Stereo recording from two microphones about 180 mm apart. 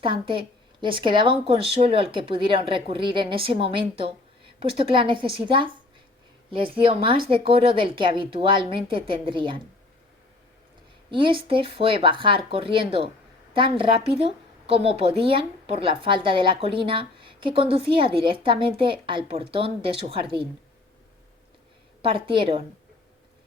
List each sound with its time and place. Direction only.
0.0 s a woman's voice: 30° right (ahead or behind)
11.1 s a woman's voice: 30° right (ahead or behind)
22.0 s a woman's voice: 30° right (ahead or behind)